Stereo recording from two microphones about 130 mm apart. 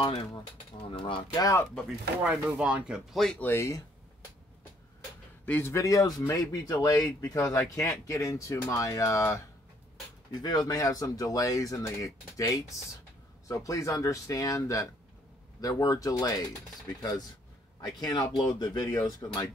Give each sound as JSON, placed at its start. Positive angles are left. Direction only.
{"t": 0.8, "sound": "speech", "side_deg": 40}
{"t": 1.4, "sound": "speech", "side_deg": 25}
{"t": 2.2, "sound": "speech", "side_deg": -5}
{"t": 3.3, "sound": "speech", "side_deg": 20}
{"t": 5.4, "sound": "speech", "side_deg": 15}
{"t": 10.4, "sound": "speech", "side_deg": 30}
{"t": 18.0, "sound": "speech", "side_deg": 30}